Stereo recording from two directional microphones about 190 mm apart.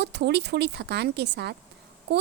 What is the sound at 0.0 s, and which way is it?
Speech, 60° right (ahead or behind).